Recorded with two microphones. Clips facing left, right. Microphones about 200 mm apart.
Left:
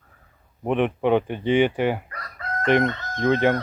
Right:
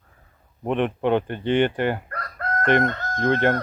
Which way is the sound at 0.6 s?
5° left (ahead or behind).